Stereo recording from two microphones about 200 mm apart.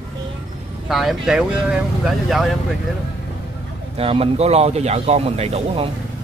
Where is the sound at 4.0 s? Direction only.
30° right (ahead or behind).